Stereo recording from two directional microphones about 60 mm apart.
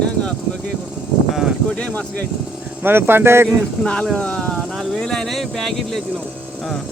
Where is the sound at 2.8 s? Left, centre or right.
Right.